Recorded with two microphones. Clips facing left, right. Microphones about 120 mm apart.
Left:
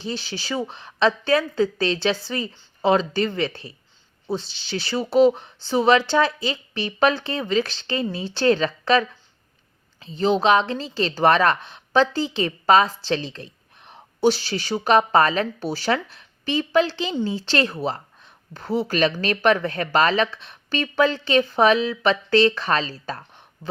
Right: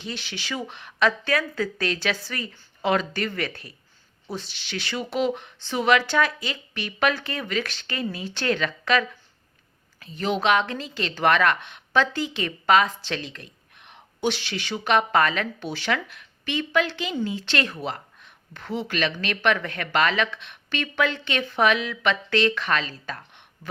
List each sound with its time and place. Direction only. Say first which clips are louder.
0.0 s a woman's voice: left 5 dB; 30° left (ahead or behind)